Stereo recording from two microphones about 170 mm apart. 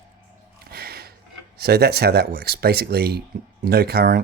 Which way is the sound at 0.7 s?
65° right (ahead or behind).